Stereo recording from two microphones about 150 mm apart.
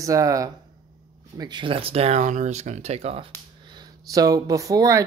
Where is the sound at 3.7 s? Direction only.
25° right (ahead or behind).